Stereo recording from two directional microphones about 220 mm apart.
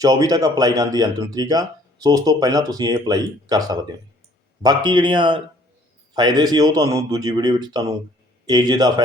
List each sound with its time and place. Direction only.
0.0 s speech: 15° right (ahead or behind)